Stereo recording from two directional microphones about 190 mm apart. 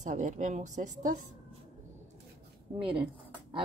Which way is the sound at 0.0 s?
40° right (ahead or behind).